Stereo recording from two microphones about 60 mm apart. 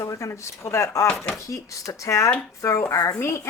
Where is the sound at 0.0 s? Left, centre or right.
Left.